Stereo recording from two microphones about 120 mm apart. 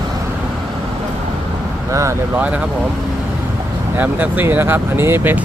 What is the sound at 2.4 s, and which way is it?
Speech, 10° right (ahead or behind).